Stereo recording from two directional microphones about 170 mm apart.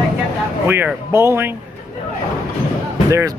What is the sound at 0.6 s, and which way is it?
Speech, 10° right (ahead or behind).